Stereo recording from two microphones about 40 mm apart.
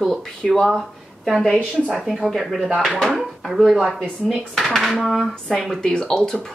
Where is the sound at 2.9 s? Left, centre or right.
Centre.